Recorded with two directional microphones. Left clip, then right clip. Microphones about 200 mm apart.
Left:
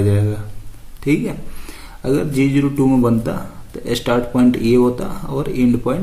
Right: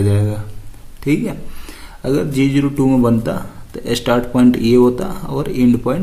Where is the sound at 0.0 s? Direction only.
25° right (ahead or behind).